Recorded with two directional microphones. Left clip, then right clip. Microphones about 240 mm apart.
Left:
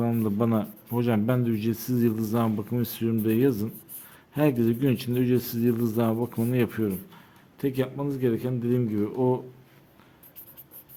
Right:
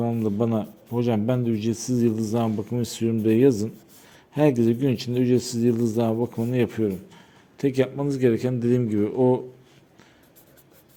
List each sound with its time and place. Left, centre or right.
0.0 s speech: centre
6.1 s speech: centre
6.5 s speech: centre
7.6 s speech: centre